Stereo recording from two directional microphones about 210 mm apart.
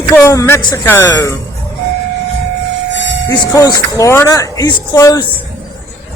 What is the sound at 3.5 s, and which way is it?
Speech, 15° left (ahead or behind).